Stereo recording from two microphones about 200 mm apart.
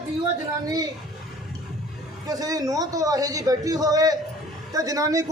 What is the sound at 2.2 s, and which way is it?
A man's voice, 20° right (ahead or behind).